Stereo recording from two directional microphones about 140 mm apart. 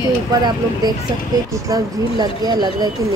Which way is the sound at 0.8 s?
30° right (ahead or behind).